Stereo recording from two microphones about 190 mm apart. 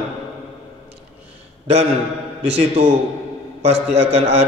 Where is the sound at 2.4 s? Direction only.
35° right (ahead or behind).